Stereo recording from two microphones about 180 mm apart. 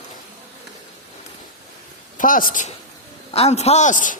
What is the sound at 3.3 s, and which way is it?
Speech, 35° left (ahead or behind).